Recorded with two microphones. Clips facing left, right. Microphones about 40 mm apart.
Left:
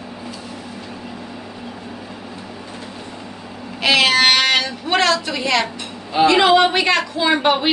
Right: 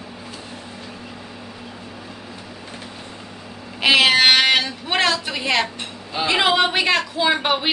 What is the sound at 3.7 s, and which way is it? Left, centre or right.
Speech, centre.